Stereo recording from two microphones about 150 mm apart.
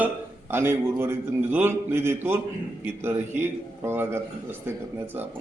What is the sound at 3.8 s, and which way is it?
Speech, 15° right (ahead or behind).